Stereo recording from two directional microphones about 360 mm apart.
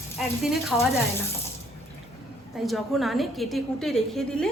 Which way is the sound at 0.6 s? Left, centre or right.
Centre.